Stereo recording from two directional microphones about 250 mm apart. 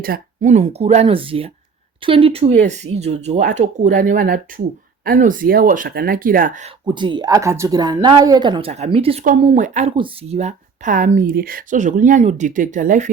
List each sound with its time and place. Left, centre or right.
0.0 s speech: right
6.8 s speech: centre